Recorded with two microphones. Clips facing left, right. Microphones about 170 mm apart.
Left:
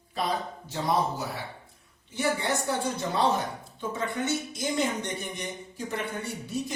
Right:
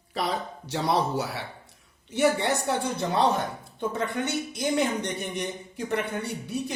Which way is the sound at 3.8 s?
65° right (ahead or behind).